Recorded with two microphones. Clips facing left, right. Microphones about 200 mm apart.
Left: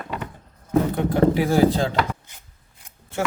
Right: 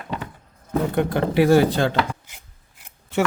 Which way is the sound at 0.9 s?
70° right (ahead or behind).